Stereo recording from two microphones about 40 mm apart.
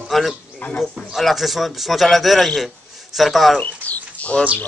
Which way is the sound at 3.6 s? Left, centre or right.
Left.